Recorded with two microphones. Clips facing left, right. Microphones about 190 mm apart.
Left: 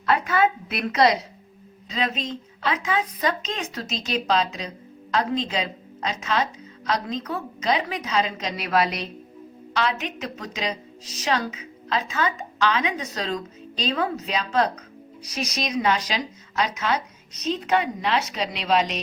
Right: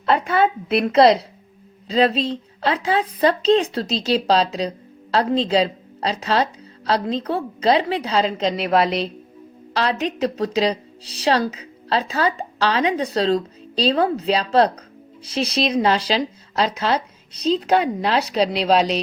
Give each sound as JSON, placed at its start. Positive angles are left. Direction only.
{"t": 0.0, "sound": "a woman's voice", "side_deg": -30}